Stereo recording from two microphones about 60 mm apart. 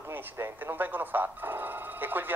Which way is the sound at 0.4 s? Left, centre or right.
Right.